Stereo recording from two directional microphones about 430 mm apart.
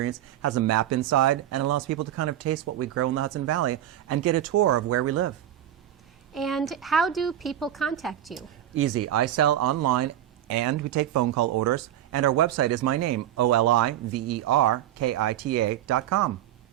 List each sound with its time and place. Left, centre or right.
0.0 s speech: right
6.3 s a woman's voice: centre
8.7 s speech: right